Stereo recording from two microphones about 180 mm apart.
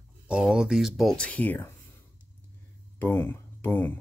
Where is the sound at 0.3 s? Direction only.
5° right (ahead or behind).